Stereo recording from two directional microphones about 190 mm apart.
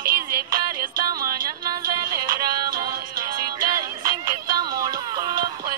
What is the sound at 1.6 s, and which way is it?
Music, 20° right (ahead or behind).